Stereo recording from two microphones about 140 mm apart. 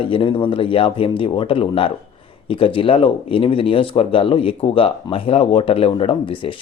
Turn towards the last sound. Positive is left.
turn(degrees=40)  # may be behind; listen again after turning